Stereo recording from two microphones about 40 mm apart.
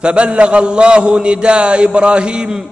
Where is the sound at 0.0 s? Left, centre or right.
Right.